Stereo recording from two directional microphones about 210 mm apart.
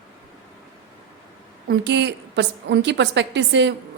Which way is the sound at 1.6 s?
55° right (ahead or behind).